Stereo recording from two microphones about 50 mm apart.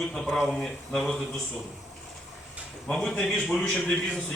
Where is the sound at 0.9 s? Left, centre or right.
Centre.